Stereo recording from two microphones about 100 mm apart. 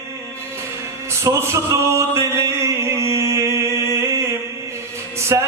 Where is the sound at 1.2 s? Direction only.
30° right (ahead or behind).